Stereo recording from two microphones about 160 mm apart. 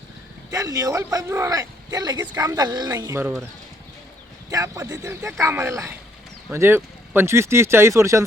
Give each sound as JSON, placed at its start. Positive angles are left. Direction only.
{"t": 0.5, "sound": "speech", "side_deg": -20}
{"t": 4.4, "sound": "speech", "side_deg": -20}